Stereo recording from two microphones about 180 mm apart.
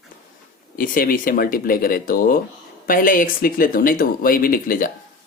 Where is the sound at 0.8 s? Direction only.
55° left (ahead or behind).